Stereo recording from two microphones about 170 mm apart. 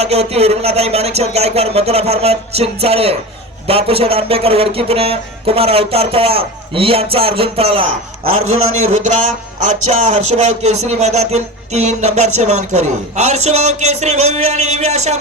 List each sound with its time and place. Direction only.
0.0 s speech: 40° right (ahead or behind)